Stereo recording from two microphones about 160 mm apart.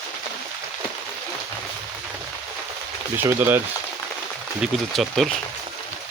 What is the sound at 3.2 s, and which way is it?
Speech, 15° right (ahead or behind).